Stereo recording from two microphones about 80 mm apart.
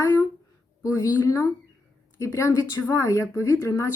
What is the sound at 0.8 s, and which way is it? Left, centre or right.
Speech, left.